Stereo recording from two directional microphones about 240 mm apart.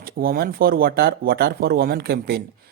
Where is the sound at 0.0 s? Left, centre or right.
Right.